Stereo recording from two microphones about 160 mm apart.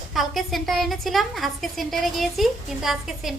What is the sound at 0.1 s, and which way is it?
A woman's voice, centre (ahead or behind).